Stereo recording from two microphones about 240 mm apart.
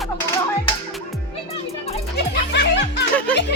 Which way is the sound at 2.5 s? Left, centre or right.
Left.